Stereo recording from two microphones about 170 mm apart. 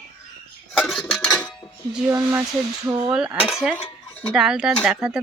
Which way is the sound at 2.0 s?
10° right (ahead or behind).